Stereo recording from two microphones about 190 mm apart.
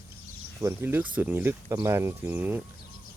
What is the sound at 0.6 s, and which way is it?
Speech, 15° right (ahead or behind).